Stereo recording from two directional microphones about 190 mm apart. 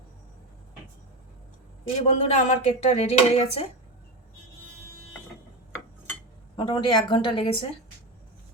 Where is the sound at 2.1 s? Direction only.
35° left (ahead or behind).